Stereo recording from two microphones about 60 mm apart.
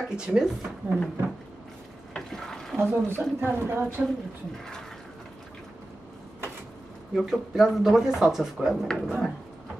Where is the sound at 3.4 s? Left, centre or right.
Right.